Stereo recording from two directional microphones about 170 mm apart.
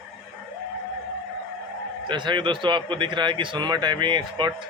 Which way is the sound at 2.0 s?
25° right (ahead or behind).